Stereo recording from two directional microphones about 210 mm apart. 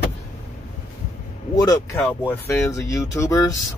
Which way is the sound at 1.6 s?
15° left (ahead or behind).